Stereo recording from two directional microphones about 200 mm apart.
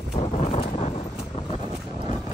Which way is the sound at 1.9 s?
20° right (ahead or behind).